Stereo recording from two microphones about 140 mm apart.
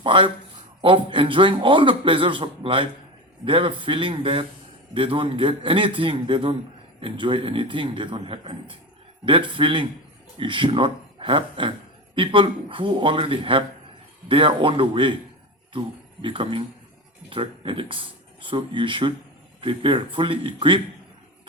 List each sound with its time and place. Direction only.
0.0 s a man's voice: 40° right (ahead or behind)
16.2 s a man's voice: 35° right (ahead or behind)